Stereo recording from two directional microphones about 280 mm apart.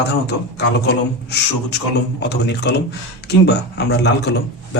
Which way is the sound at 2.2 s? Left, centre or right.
Left.